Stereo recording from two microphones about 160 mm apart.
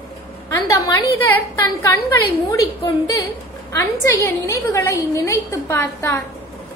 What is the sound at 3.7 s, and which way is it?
A woman's voice, 15° left (ahead or behind).